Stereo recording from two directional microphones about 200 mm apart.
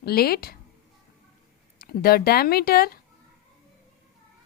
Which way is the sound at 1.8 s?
50° left (ahead or behind).